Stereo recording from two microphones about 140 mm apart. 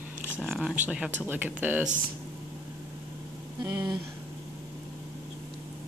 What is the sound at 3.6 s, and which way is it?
Speech, 25° right (ahead or behind).